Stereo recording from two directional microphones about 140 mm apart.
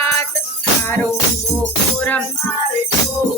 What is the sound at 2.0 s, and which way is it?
Music, 10° left (ahead or behind).